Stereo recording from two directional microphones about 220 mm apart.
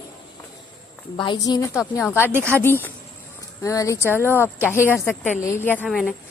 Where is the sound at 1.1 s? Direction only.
20° left (ahead or behind).